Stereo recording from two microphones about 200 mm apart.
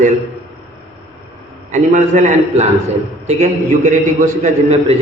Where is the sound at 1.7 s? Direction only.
35° right (ahead or behind).